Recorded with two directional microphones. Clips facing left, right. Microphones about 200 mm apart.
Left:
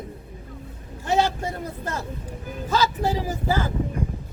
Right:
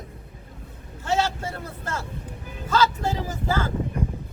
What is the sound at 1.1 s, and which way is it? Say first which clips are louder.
Speech: left 2 dB; 15° left (ahead or behind).